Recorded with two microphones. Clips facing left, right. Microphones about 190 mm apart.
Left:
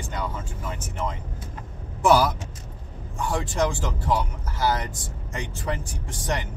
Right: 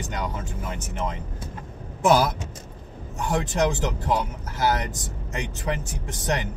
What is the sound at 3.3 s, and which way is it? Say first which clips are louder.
Speech: right 2 dB; 20° right (ahead or behind).